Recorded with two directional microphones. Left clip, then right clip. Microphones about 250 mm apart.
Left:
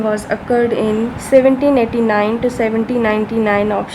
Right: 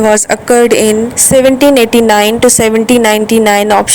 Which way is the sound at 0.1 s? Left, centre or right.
Right.